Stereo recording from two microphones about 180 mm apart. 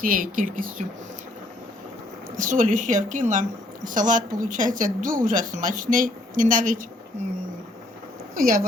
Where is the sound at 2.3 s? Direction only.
45° right (ahead or behind).